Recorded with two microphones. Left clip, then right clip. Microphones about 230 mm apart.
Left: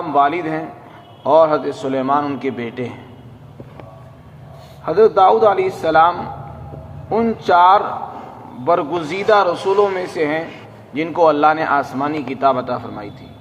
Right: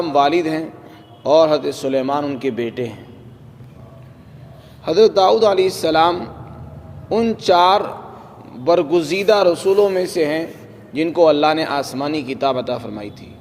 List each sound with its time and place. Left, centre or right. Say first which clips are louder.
0.1 s a man's voice: left 1 dB; right
4.9 s a man's voice: left 1 dB; right
7.2 s a man's voice: left 1 dB; right
10.9 s a man's voice: right 1 dB; right